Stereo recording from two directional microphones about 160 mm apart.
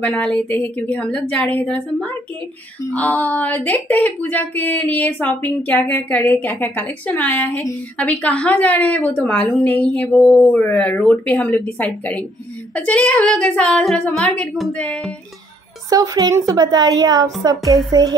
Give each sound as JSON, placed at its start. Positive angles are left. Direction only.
{"t": 0.0, "sound": "speech", "side_deg": 10}
{"t": 15.9, "sound": "a woman's voice", "side_deg": -20}